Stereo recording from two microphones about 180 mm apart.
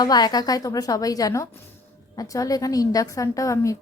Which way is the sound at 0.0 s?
20° left (ahead or behind).